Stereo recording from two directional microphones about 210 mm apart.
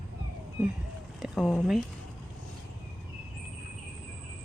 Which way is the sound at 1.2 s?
Centre (ahead or behind).